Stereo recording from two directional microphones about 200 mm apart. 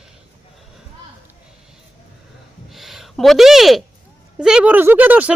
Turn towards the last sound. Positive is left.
turn(degrees=-10)  # may be behind; listen again after turning